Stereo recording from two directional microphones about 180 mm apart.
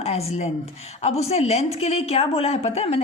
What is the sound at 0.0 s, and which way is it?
A woman's voice, 35° left (ahead or behind).